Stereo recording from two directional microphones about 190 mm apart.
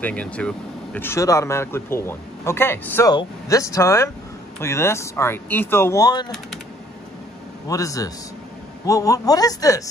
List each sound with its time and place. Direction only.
0.0 s speech: 5° left (ahead or behind)
7.6 s speech: 15° left (ahead or behind)